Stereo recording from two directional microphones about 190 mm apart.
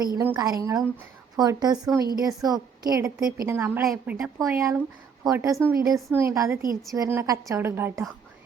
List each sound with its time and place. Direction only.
0.0 s a woman's voice: 15° right (ahead or behind)